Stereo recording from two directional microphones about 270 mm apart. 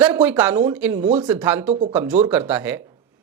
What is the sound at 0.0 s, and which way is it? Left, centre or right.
Speech, centre.